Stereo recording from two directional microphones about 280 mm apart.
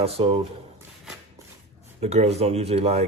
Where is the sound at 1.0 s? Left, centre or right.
Centre.